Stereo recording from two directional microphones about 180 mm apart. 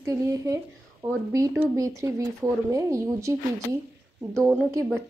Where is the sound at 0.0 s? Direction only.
15° right (ahead or behind).